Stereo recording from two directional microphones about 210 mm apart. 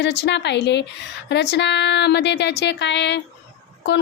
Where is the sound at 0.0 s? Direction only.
55° left (ahead or behind).